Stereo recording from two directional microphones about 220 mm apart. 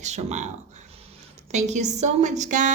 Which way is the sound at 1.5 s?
30° right (ahead or behind).